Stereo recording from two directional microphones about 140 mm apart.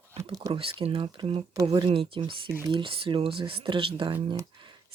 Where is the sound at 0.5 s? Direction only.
40° right (ahead or behind).